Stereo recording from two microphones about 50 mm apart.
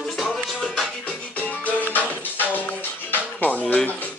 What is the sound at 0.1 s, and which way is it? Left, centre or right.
Music, centre.